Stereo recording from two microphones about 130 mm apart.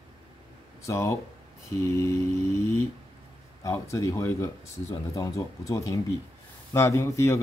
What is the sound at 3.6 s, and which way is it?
A man's voice, 25° left (ahead or behind).